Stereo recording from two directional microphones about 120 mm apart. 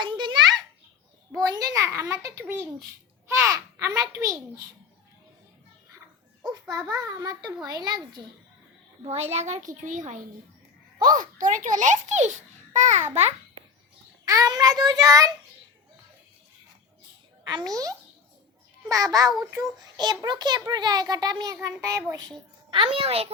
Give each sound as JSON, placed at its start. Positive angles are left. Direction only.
{"t": 0.0, "sound": "a sound", "side_deg": -40}
{"t": 1.3, "sound": "a child's voice", "side_deg": -30}
{"t": 6.4, "sound": "a child's voice", "side_deg": -35}
{"t": 9.0, "sound": "a child's voice", "side_deg": -65}
{"t": 14.3, "sound": "a child's voice", "side_deg": -30}
{"t": 17.4, "sound": "a child's voice", "side_deg": -35}
{"t": 22.7, "sound": "a child's voice", "side_deg": -50}